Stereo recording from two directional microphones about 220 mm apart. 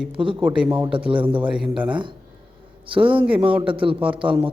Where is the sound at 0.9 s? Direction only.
25° right (ahead or behind).